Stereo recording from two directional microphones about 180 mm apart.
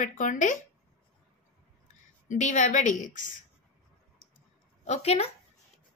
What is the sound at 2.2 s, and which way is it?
A woman's voice, 45° left (ahead or behind).